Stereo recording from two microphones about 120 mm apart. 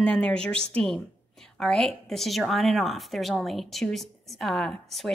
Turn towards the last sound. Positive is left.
turn(degrees=0)  # may be behind; listen again after turning